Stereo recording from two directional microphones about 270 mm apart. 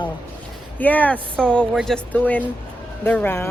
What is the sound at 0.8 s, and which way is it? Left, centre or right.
Speech, centre.